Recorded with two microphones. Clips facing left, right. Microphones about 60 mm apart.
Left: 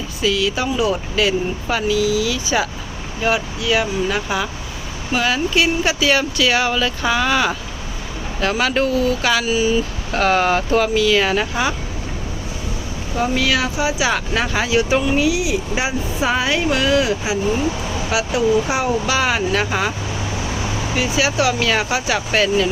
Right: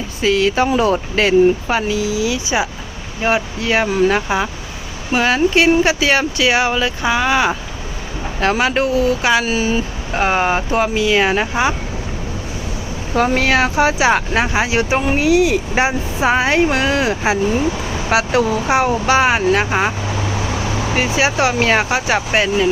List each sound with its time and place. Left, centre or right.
0.2 s speech: right
1.6 s speech: right
8.4 s speech: right
10.1 s speech: right
13.1 s speech: right
20.9 s speech: right